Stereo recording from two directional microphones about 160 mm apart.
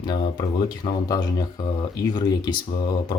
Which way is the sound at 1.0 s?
25° left (ahead or behind).